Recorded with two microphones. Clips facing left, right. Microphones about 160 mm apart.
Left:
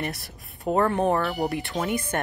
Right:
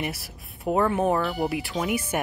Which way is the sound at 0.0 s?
5° right (ahead or behind).